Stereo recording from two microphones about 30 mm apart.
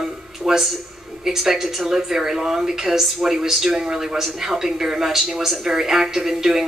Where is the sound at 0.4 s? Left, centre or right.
Right.